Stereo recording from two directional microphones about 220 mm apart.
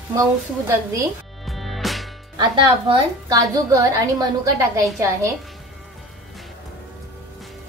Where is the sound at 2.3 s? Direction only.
20° right (ahead or behind).